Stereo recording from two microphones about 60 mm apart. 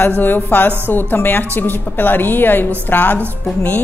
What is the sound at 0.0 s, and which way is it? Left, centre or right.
Speech, left.